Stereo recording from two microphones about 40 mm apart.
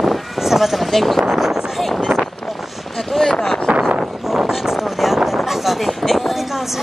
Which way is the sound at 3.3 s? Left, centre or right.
Centre.